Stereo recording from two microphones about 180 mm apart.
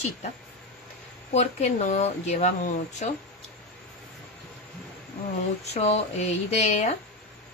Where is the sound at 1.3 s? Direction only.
35° left (ahead or behind).